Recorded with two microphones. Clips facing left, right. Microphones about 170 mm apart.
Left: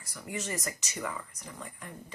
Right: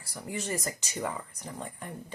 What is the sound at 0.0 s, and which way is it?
Speech, 30° right (ahead or behind).